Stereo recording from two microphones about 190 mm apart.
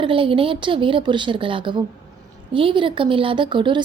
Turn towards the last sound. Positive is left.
turn(degrees=-25)  # may be behind; listen again after turning